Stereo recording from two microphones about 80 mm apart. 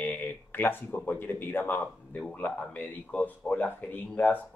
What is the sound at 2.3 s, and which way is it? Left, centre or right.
Speech, centre.